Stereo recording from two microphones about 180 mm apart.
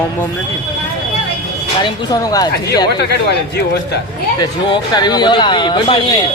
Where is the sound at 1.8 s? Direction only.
20° left (ahead or behind).